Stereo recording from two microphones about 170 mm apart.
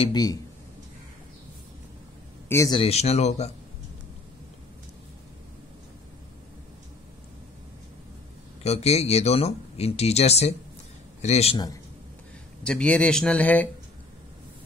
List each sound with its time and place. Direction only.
0.0 s speech: 25° left (ahead or behind)
2.4 s a sound: 15° left (ahead or behind)
2.7 s speech: 35° left (ahead or behind)
8.6 s a man's voice: 40° left (ahead or behind)
11.5 s speech: 20° left (ahead or behind)
12.6 s speech: 5° left (ahead or behind)